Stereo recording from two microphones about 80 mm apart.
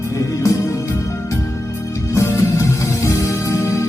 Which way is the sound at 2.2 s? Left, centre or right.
Left.